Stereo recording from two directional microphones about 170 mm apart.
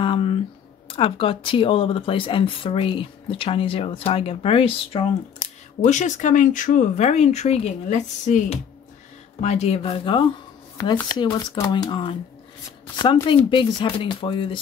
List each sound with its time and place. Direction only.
0.0 s speech: 30° left (ahead or behind)
5.8 s speech: 45° left (ahead or behind)
11.3 s speech: 25° left (ahead or behind)